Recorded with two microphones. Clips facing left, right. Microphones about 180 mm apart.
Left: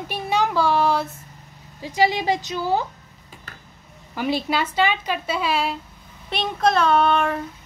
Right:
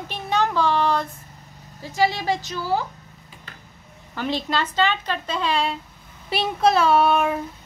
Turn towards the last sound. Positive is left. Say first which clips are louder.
# right 1 dB
turn(degrees=-5)  # may be behind; listen again after turning